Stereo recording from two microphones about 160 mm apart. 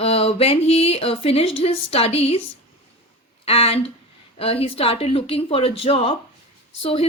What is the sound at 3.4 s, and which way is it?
Speech, 35° left (ahead or behind).